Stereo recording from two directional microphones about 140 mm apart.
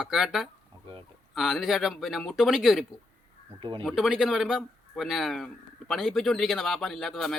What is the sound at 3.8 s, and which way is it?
Speech, centre (ahead or behind).